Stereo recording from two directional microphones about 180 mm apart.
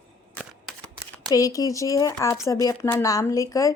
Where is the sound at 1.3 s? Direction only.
20° left (ahead or behind).